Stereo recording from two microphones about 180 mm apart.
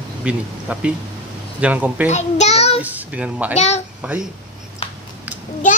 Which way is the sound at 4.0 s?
5° right (ahead or behind).